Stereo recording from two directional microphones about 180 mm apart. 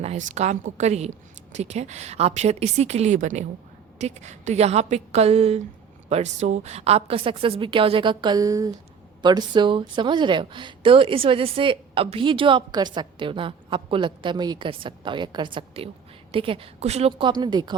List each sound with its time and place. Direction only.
0.0 s a woman's voice: 40° right (ahead or behind); by 17.7 s 25° right (ahead or behind)